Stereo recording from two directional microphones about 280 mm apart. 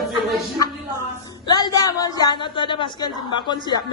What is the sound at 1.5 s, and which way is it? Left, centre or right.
Speech, centre.